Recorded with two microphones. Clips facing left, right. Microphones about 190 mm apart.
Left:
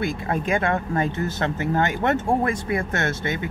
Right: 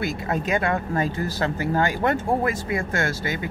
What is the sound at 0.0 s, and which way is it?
Speech, 25° left (ahead or behind).